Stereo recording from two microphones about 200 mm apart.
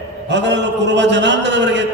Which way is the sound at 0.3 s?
60° right (ahead or behind).